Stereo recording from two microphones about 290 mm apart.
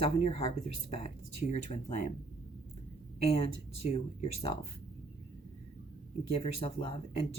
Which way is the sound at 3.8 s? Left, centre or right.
Left.